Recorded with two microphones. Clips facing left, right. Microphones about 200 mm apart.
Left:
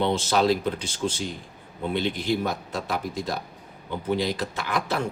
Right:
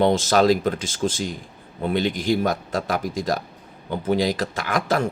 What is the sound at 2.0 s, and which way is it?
A man's voice, 90° right.